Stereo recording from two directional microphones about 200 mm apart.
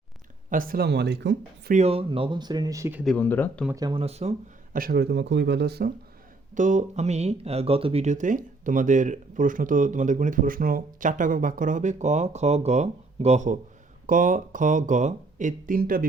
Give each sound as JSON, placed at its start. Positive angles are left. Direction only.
{"t": 0.5, "sound": "speech", "side_deg": -45}
{"t": 1.7, "sound": "speech", "side_deg": -30}
{"t": 3.0, "sound": "speech", "side_deg": 5}
{"t": 3.7, "sound": "speech", "side_deg": -20}
{"t": 4.8, "sound": "speech", "side_deg": -50}
{"t": 6.5, "sound": "speech", "side_deg": -40}